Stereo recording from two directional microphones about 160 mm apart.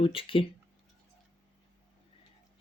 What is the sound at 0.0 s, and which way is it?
Speech, 35° left (ahead or behind).